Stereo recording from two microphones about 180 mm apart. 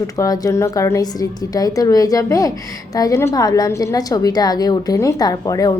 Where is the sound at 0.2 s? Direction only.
20° left (ahead or behind).